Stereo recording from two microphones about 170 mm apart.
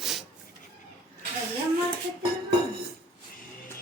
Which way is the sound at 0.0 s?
Centre (ahead or behind).